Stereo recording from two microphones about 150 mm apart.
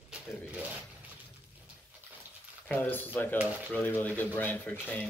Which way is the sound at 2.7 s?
10° left (ahead or behind).